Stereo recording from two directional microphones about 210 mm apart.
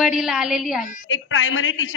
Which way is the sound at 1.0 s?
65° left (ahead or behind).